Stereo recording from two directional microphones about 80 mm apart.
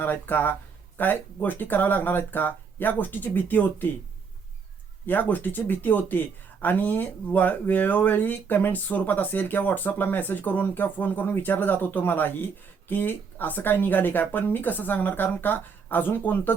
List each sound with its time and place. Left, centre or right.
0.0 s speech: left
5.0 s speech: left